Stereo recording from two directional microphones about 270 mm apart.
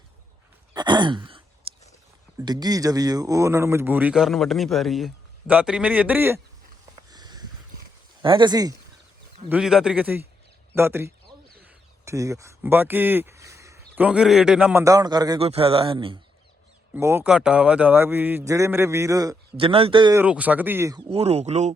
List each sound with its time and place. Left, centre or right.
0.7 s sigh: centre
2.4 s speech: centre
7.1 s a sound: centre
8.2 s speech: centre
9.5 s a man's voice: centre
21.1 s speech: right